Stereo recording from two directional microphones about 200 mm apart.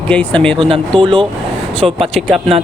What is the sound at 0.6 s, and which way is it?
Speech, 25° right (ahead or behind).